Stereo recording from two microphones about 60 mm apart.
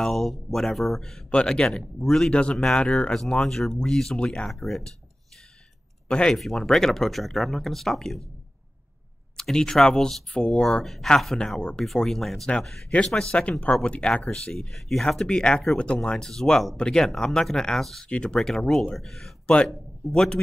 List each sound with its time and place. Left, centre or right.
0.0 s speech: centre
2.3 s speech: centre
4.6 s speech: centre
6.0 s speech: centre
6.3 s speech: centre
9.4 s speech: centre
19.4 s speech: centre
20.1 s speech: centre